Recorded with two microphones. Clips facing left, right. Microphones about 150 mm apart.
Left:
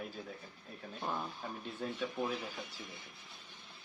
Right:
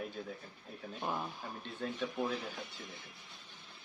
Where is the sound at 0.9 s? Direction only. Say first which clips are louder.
Right 1 dB; 10° right (ahead or behind).